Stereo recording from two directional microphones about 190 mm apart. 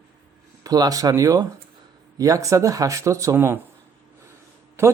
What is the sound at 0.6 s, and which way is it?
Speech, 20° right (ahead or behind).